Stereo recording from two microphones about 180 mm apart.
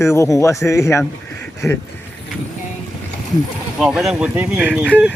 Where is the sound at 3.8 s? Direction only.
Centre (ahead or behind).